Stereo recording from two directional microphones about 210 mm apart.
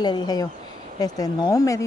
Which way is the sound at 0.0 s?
20° left (ahead or behind).